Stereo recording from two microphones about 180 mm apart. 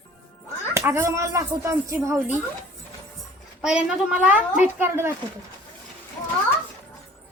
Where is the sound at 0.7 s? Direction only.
15° right (ahead or behind).